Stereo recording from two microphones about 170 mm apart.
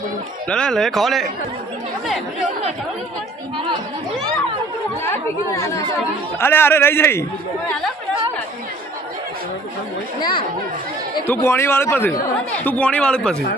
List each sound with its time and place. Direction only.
0.4 s a man's voice: 5° left (ahead or behind)
5.0 s a man's voice: 15° left (ahead or behind)
10.2 s speech: 25° left (ahead or behind)
11.3 s a man's voice: 15° left (ahead or behind)